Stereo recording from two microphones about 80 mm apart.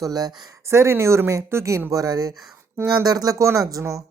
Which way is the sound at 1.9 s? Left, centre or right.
Right.